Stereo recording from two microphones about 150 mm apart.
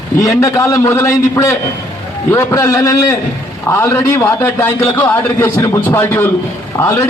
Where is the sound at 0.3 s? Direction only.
20° left (ahead or behind).